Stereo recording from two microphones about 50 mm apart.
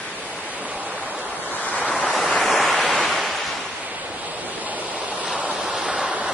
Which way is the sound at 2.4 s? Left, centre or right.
Centre.